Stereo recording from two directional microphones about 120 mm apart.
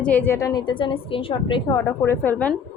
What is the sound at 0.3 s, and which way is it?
Speech, 25° left (ahead or behind).